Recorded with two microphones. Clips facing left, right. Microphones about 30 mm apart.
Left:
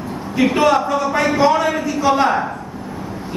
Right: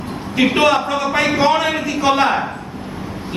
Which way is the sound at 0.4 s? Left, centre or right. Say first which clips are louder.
Even; right.